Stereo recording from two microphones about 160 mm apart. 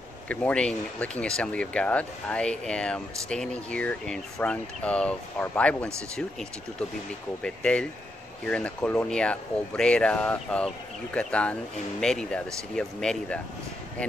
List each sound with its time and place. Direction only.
0.3 s speech: 5° left (ahead or behind)
7.4 s speech: 5° left (ahead or behind)